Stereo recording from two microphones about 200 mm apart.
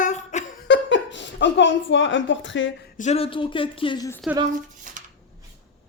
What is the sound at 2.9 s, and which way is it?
Speech, 35° left (ahead or behind).